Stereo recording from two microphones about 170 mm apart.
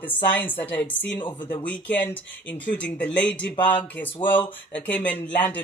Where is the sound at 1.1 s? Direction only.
30° left (ahead or behind).